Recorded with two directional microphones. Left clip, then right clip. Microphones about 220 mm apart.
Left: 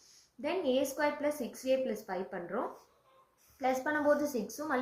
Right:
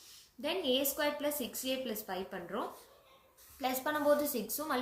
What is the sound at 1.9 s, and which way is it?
Speech, 25° right (ahead or behind).